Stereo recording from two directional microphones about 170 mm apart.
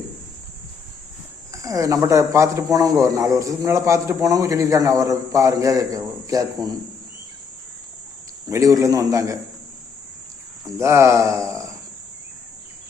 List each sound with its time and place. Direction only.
1.5 s speech: 20° right (ahead or behind)
8.4 s speech: 20° right (ahead or behind)
10.8 s speech: 15° right (ahead or behind)